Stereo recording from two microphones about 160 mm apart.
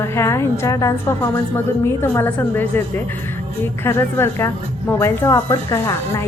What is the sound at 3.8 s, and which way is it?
Speech, 15° left (ahead or behind).